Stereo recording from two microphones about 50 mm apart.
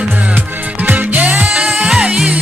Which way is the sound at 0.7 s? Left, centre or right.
Right.